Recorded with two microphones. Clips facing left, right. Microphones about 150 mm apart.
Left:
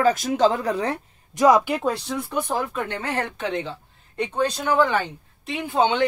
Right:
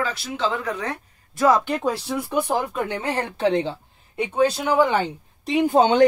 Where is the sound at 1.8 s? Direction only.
Centre (ahead or behind).